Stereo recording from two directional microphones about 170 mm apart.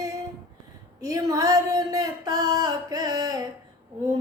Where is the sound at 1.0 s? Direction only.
20° right (ahead or behind).